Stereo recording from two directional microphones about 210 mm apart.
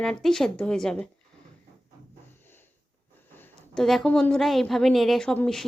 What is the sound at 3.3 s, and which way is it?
A woman's voice, 5° left (ahead or behind).